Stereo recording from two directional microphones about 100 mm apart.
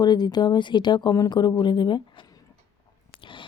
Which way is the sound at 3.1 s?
55° left (ahead or behind).